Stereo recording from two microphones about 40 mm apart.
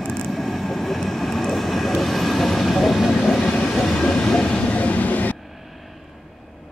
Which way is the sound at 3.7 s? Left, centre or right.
Centre.